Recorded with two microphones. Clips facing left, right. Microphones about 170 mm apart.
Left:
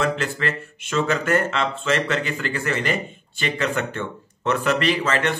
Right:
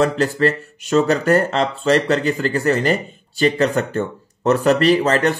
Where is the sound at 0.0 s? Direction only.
40° right (ahead or behind).